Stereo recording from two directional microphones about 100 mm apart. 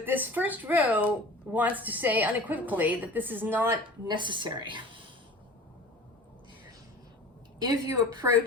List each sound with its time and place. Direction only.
0.0 s speech: 20° right (ahead or behind)
4.0 s a woman's voice: 50° right (ahead or behind)
7.6 s a woman's voice: 40° right (ahead or behind)